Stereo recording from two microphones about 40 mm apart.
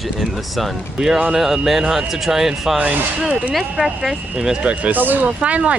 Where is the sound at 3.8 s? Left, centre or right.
Centre.